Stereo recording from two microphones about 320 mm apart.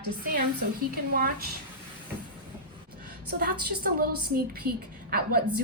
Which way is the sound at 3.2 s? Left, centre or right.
Right.